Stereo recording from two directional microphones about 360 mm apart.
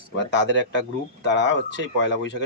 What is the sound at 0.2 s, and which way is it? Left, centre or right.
Speech, left.